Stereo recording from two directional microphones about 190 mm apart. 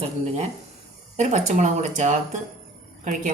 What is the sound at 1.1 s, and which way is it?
Speech, 35° right (ahead or behind).